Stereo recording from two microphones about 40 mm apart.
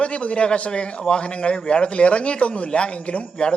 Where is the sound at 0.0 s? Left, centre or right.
Left.